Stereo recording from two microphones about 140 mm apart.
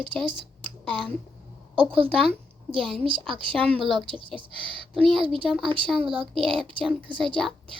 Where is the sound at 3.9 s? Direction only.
35° right (ahead or behind).